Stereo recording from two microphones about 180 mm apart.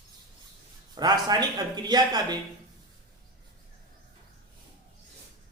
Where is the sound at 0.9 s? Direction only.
20° right (ahead or behind).